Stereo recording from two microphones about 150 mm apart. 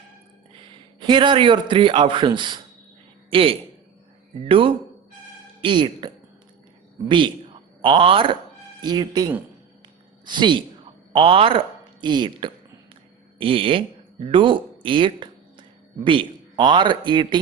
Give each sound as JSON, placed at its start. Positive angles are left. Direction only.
{"t": 0.9, "sound": "a man's voice", "side_deg": -35}
{"t": 7.8, "sound": "a man's voice", "side_deg": -35}